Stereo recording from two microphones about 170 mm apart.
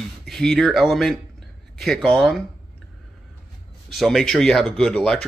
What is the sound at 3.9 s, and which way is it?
Speech, centre (ahead or behind).